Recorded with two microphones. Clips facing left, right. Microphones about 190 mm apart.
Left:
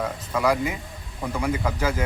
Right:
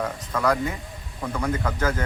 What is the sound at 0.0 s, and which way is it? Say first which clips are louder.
A man's voice: left 1 dB; 10° left (ahead or behind).